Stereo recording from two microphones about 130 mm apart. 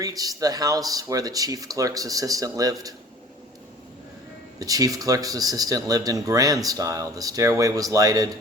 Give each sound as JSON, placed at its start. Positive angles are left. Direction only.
{"t": 0.0, "sound": "speech", "side_deg": -30}
{"t": 4.6, "sound": "speech", "side_deg": -25}